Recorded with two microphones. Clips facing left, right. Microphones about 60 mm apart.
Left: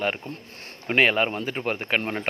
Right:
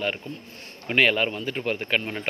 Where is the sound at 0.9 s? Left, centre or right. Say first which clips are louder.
Left 1 dB; left.